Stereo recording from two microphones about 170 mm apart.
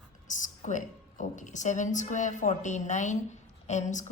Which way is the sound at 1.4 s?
45° left (ahead or behind).